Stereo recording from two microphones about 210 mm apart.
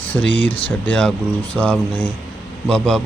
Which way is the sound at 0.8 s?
5° left (ahead or behind).